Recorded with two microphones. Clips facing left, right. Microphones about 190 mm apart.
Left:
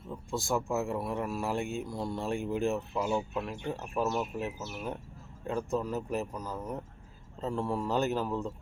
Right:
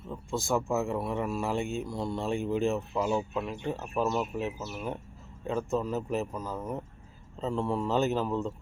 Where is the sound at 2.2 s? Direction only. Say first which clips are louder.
Right 2 dB; 15° left (ahead or behind).